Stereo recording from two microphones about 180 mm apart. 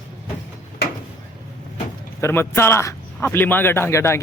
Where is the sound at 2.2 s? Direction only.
15° left (ahead or behind).